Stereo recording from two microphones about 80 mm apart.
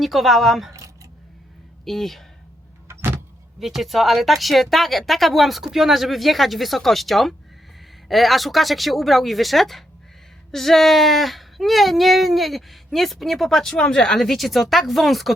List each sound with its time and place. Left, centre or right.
0.0 s speech: centre
1.8 s speech: centre
2.8 s vehicle: right
3.6 s speech: centre